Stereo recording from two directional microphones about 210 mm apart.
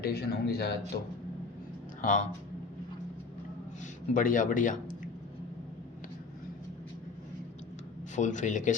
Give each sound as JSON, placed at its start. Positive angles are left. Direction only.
{"t": 0.0, "sound": "a man's voice", "side_deg": 50}
{"t": 2.0, "sound": "speech", "side_deg": 35}
{"t": 4.1, "sound": "speech", "side_deg": 40}
{"t": 8.1, "sound": "speech", "side_deg": 35}